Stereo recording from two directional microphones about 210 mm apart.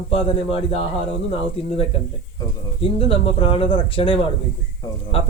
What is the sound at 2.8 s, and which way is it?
A man's voice, 25° left (ahead or behind).